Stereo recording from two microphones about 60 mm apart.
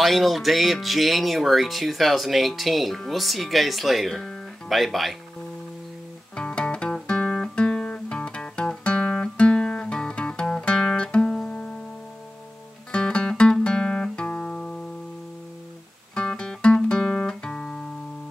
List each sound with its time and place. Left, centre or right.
0.0 s speech: centre
6.3 s guitar: centre
11.4 s music: left
12.9 s music: centre
16.2 s guitar: centre